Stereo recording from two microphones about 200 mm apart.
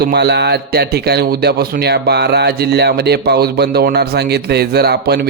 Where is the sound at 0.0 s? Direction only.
55° right (ahead or behind).